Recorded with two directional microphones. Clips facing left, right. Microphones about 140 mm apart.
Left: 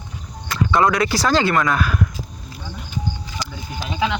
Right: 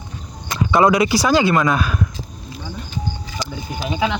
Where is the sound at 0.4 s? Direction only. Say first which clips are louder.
Right 2 dB; 15° right (ahead or behind).